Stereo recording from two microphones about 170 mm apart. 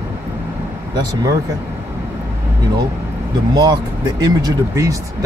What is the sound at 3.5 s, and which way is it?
Speech, 25° right (ahead or behind).